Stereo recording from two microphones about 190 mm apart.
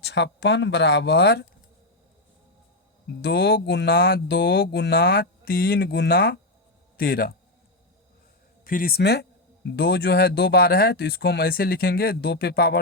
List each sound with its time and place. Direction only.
0.0 s speech: 65° left (ahead or behind)
3.2 s speech: 60° left (ahead or behind)
8.6 s speech: 50° left (ahead or behind)